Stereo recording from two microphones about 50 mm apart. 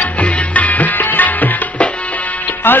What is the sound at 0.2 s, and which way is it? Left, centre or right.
Music, left.